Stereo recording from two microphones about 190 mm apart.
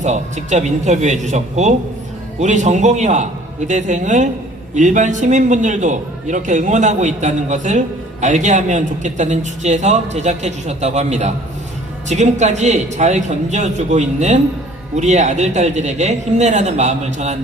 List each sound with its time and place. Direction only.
0.0 s a man's voice: 40° right (ahead or behind)